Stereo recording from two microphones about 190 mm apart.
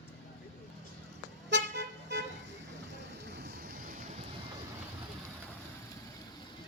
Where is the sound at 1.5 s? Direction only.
65° right (ahead or behind).